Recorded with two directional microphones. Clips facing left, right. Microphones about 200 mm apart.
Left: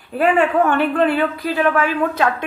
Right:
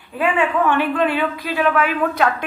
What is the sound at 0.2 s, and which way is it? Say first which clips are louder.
A woman's voice: left 3 dB; 40° left (ahead or behind).